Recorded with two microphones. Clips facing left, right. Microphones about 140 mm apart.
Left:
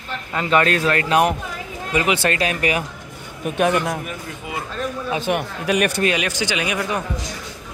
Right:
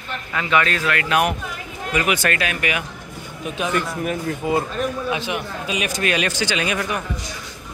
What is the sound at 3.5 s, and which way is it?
Speech, 50° left (ahead or behind).